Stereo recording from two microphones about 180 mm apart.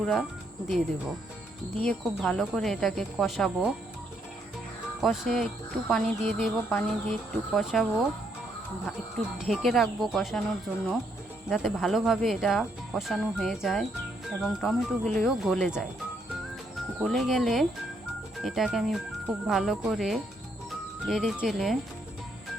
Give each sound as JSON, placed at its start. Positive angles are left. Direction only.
{"t": 0.0, "sound": "speech", "side_deg": 0}
{"t": 1.8, "sound": "speech", "side_deg": 5}
{"t": 4.9, "sound": "speech", "side_deg": 0}
{"t": 9.1, "sound": "speech", "side_deg": 0}
{"t": 11.4, "sound": "speech", "side_deg": 0}
{"t": 17.0, "sound": "speech", "side_deg": 0}